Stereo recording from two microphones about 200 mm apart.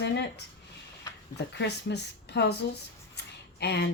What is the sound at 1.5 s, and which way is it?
Speech, 55° left (ahead or behind).